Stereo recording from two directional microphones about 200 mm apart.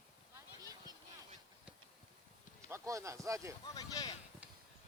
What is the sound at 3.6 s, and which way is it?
Speech, 20° left (ahead or behind).